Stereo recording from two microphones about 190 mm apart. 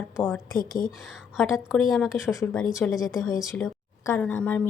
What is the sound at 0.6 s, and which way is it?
Speech, 45° left (ahead or behind).